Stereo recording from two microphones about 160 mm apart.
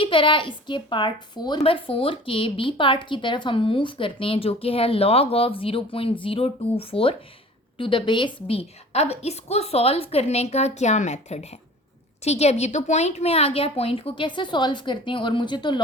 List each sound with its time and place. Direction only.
0.0 s a woman's voice: 30° left (ahead or behind)